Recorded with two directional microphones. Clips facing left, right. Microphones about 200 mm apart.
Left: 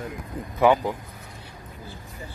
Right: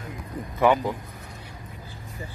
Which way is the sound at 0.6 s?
10° left (ahead or behind).